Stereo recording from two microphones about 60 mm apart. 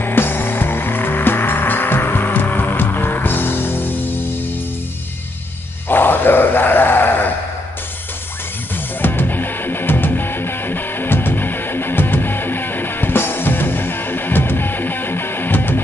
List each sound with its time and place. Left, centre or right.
0.0 s vehicle: left
5.9 s a sound: left
9.0 s music: left